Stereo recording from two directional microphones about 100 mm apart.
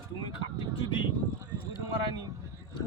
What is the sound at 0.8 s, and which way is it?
Speech, 55° left (ahead or behind).